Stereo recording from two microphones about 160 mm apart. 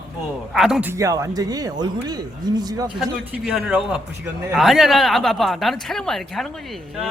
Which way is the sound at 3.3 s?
10° right (ahead or behind).